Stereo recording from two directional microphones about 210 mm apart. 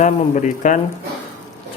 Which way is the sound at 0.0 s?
35° left (ahead or behind).